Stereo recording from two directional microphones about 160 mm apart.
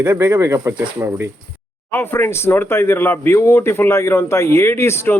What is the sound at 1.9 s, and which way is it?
Speech, 15° left (ahead or behind).